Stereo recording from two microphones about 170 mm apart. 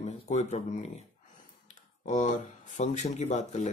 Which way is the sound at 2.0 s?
45° left (ahead or behind).